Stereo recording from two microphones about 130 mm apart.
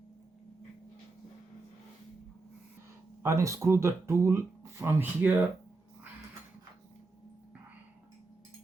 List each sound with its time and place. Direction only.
3.2 s speech: 25° right (ahead or behind)